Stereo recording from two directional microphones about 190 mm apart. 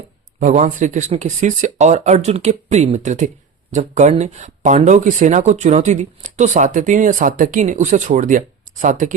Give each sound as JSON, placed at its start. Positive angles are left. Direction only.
{"t": 0.3, "sound": "speech", "side_deg": -40}